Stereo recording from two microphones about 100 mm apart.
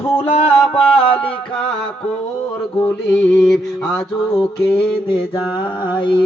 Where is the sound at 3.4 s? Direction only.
5° left (ahead or behind).